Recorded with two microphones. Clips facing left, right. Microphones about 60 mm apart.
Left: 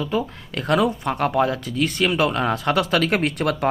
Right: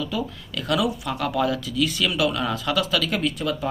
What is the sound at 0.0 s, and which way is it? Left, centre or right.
Speech, left.